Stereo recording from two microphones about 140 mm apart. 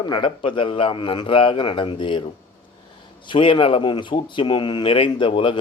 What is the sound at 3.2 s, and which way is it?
A man's voice, 40° left (ahead or behind).